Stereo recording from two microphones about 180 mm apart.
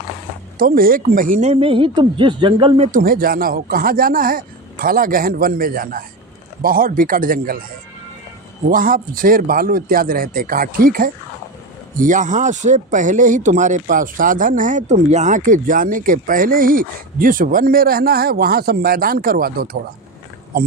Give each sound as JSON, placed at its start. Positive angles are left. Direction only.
{"t": 0.6, "sound": "a woman's voice", "side_deg": -50}
{"t": 3.0, "sound": "speech", "side_deg": -55}
{"t": 8.7, "sound": "speech", "side_deg": -50}